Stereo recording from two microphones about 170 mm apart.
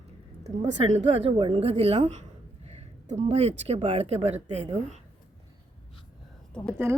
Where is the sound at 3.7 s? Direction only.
35° right (ahead or behind).